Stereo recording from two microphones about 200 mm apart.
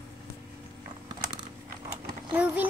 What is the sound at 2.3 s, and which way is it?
Speech, 10° right (ahead or behind).